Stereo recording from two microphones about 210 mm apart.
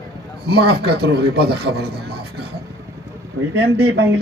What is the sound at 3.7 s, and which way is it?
Speech, 50° right (ahead or behind).